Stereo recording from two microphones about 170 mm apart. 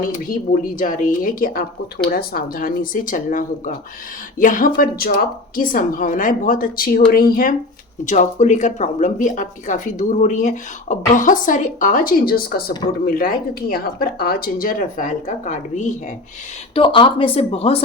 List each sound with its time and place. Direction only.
0.8 s speech: 55° left (ahead or behind)
8.0 s speech: 45° left (ahead or behind)
16.7 s speech: 30° left (ahead or behind)